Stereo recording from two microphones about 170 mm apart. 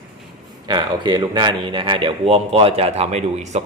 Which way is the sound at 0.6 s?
25° right (ahead or behind).